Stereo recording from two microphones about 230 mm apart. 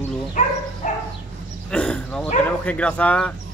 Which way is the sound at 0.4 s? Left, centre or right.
Left.